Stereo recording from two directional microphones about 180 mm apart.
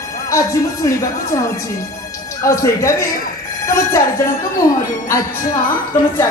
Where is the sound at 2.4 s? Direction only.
15° left (ahead or behind).